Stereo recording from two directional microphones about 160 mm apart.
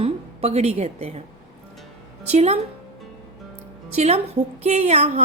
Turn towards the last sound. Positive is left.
turn(degrees=-40)  # may be behind; listen again after turning